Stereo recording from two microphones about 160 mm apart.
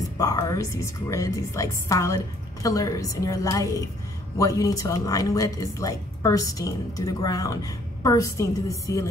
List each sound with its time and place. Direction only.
0.2 s a woman's voice: 20° left (ahead or behind)